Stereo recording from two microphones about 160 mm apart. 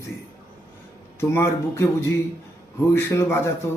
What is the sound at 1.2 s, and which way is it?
Speech, 15° left (ahead or behind).